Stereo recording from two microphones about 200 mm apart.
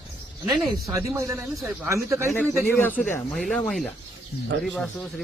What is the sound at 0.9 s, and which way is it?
A man's voice, 15° right (ahead or behind).